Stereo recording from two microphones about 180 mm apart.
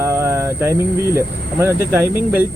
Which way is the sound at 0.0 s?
15° right (ahead or behind).